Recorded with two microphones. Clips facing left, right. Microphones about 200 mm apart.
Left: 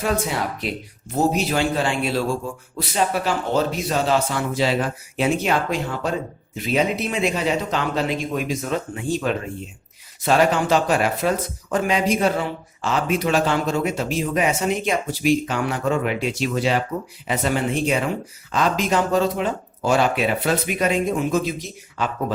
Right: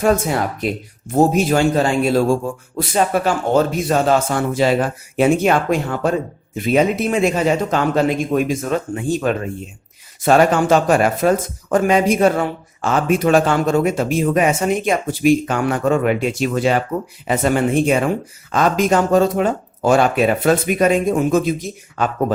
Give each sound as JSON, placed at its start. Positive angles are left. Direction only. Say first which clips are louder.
{"t": 0.0, "sound": "speech", "louder": "right 6 dB", "side_deg": -45}